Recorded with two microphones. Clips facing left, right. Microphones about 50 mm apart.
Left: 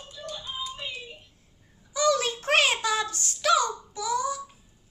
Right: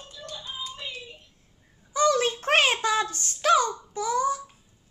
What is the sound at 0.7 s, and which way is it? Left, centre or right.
Child singing, centre.